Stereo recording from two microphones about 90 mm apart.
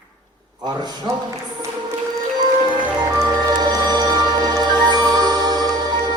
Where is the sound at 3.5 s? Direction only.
50° right (ahead or behind).